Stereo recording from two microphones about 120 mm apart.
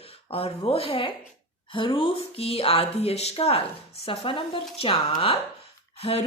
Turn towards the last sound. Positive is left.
turn(degrees=55)  # may be behind; listen again after turning